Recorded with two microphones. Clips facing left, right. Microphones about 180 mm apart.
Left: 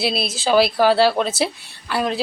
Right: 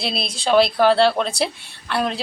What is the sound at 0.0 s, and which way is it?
A woman's voice, 5° left (ahead or behind).